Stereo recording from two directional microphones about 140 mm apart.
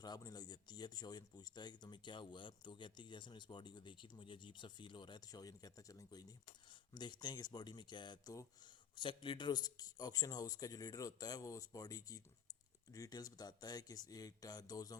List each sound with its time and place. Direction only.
0.0 s speech: 30° left (ahead or behind)